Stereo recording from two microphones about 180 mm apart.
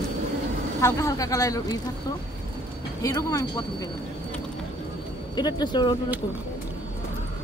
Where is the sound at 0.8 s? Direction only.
15° left (ahead or behind).